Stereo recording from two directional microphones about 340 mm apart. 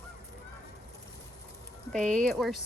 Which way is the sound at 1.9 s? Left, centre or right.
Centre.